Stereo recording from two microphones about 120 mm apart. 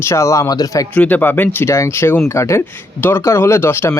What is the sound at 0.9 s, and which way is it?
Speech, 15° left (ahead or behind).